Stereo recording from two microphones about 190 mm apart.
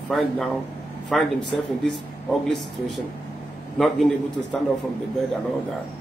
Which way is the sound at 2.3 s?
Centre (ahead or behind).